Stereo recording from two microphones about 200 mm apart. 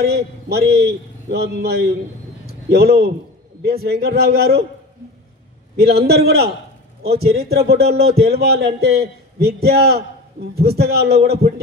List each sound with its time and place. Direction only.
0.0 s speech: 50° right (ahead or behind)
2.4 s a sound: 50° right (ahead or behind)
3.6 s speech: 50° right (ahead or behind)
5.8 s speech: 50° right (ahead or behind)